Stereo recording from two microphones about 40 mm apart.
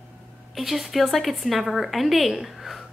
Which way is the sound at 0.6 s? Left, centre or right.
Centre.